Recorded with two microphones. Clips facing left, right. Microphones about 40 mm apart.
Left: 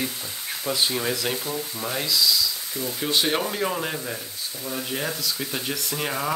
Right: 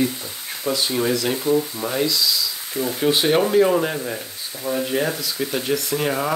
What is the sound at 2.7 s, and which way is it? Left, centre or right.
Speech, right.